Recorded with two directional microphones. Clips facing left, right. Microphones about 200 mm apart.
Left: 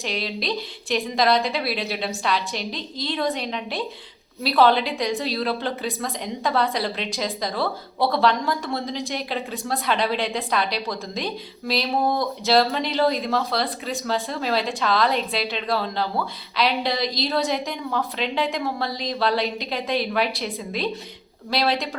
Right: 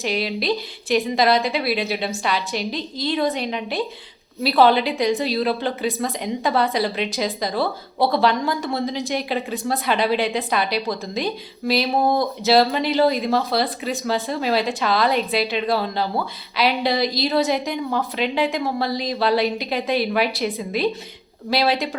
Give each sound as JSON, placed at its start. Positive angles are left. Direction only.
{"t": 0.0, "sound": "a woman's voice", "side_deg": -5}